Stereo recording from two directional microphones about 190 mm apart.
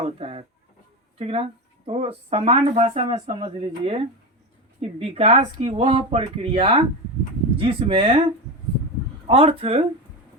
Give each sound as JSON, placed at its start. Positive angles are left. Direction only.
{"t": 0.0, "sound": "speech", "side_deg": -30}
{"t": 9.2, "sound": "speech", "side_deg": -30}